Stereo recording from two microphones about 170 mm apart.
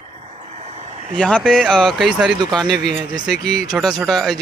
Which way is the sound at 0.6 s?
40° right (ahead or behind).